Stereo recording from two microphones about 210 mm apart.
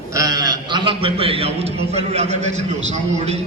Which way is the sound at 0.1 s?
15° right (ahead or behind).